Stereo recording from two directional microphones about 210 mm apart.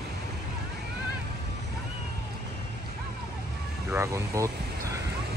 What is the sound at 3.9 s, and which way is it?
Speech, 15° right (ahead or behind).